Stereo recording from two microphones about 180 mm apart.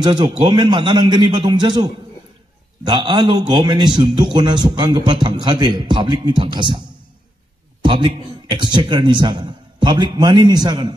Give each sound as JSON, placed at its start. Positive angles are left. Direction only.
{"t": 0.0, "sound": "a man's voice", "side_deg": -25}
{"t": 7.8, "sound": "a man's voice", "side_deg": -25}